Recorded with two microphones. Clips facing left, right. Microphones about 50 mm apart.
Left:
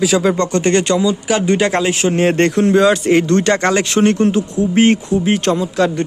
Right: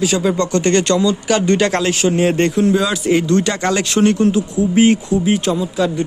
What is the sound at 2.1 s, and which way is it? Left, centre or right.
Speech, left.